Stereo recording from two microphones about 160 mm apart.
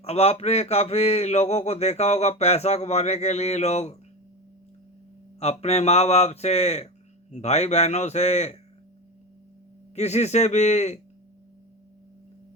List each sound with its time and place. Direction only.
0.0 s speech: 40° left (ahead or behind)
5.4 s speech: 40° left (ahead or behind)
9.9 s speech: 45° left (ahead or behind)